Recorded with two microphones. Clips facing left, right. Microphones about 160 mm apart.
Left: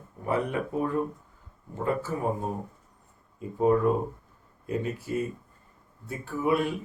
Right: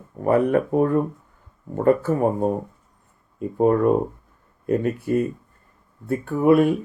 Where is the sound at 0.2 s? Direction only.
55° right (ahead or behind).